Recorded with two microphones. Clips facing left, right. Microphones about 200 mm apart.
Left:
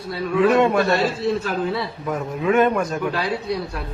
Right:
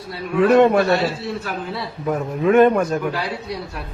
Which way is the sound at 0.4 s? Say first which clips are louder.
Right 4 dB; 40° right (ahead or behind).